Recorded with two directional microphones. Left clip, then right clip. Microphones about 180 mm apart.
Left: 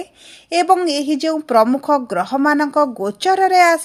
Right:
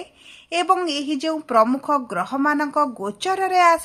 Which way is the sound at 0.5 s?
25° left (ahead or behind).